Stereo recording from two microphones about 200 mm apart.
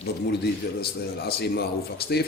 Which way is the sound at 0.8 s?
55° left (ahead or behind).